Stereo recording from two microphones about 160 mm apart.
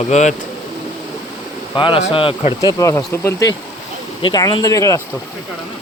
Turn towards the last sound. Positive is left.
turn(degrees=20)  # may be behind; listen again after turning